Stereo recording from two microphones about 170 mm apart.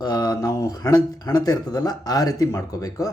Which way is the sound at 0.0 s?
25° left (ahead or behind).